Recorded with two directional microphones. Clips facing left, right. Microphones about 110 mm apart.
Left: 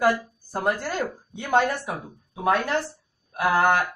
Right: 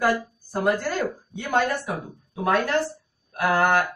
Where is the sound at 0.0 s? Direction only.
20° left (ahead or behind).